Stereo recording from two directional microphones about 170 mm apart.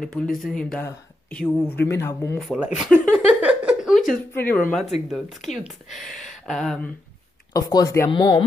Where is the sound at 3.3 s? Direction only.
5° right (ahead or behind).